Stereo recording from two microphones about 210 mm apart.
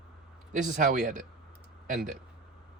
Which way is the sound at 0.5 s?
35° right (ahead or behind).